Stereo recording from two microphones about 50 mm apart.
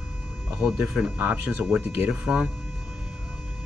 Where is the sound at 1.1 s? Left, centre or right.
Right.